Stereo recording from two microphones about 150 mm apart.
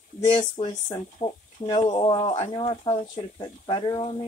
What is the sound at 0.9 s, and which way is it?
Speech, 30° left (ahead or behind).